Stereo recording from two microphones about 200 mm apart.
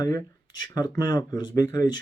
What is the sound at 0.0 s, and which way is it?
Speech, 20° left (ahead or behind).